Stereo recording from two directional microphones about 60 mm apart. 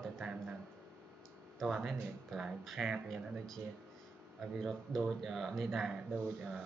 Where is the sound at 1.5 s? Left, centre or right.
Centre.